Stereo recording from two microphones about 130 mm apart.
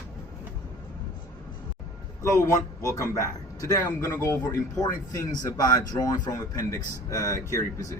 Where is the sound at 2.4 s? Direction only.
25° left (ahead or behind).